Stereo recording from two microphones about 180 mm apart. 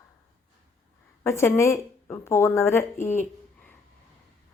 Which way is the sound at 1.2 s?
15° left (ahead or behind).